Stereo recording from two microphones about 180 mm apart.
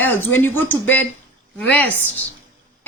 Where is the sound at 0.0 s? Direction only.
10° left (ahead or behind).